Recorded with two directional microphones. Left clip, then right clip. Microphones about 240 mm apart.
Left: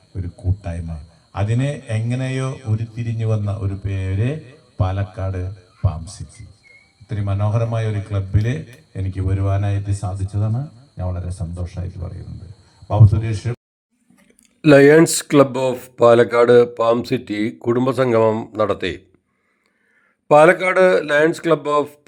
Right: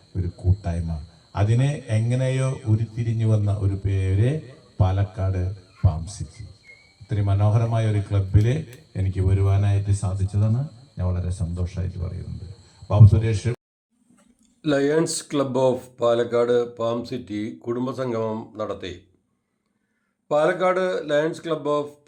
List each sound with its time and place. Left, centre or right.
0.2 s a man's voice: left
7.1 s a man's voice: left
12.9 s a man's voice: left
14.6 s a man's voice: left
20.2 s speech: left